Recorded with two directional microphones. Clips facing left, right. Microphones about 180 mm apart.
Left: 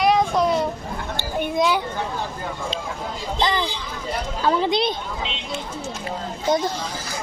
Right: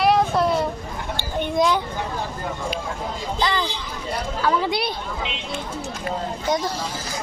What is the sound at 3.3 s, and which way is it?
A child's voice, 20° left (ahead or behind).